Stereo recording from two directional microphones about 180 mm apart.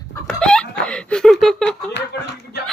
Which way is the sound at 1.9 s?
65° left (ahead or behind).